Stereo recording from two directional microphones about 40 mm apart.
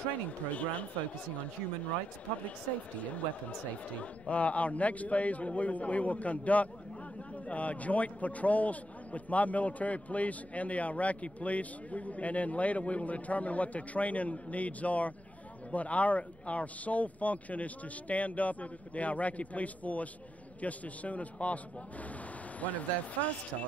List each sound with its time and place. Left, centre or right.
0.5 s a man's voice: left
2.4 s a man's voice: left
22.6 s a man's voice: left